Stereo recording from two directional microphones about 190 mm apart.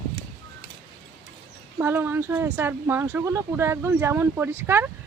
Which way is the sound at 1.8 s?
10° right (ahead or behind).